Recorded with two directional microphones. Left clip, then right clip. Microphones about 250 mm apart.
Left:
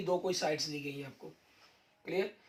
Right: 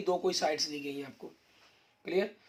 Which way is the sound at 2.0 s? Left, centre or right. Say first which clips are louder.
Right 4 dB; right.